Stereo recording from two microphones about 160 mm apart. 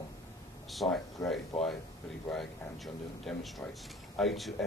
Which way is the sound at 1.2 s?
20° left (ahead or behind).